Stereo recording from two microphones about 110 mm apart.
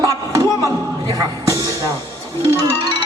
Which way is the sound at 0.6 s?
35° right (ahead or behind).